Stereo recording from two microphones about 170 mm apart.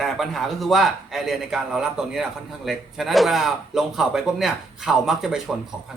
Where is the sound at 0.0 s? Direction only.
Centre (ahead or behind).